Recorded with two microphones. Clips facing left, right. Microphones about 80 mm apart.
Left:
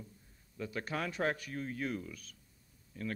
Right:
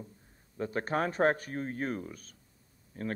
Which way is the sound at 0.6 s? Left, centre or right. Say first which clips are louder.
Right 7 dB; right.